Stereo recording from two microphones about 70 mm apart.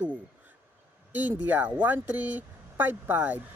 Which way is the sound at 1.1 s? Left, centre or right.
Right.